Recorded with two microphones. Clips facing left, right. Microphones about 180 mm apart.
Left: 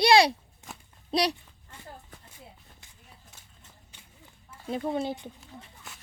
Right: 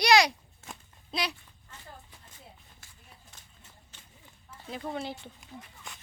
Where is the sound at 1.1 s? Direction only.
35° left (ahead or behind).